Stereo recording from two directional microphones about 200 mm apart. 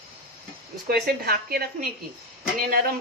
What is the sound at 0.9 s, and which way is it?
A woman's voice, 50° right (ahead or behind).